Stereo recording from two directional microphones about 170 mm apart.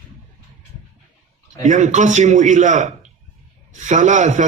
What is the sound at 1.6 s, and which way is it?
A man's voice, 45° right (ahead or behind).